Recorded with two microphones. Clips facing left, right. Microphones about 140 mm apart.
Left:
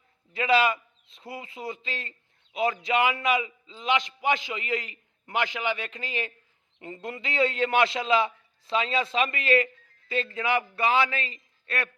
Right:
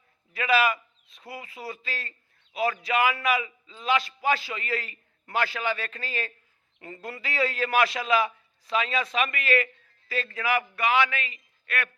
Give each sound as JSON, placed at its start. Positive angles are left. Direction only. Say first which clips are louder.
{"t": 0.3, "sound": "a man's voice", "louder": "left 1 dB", "side_deg": 25}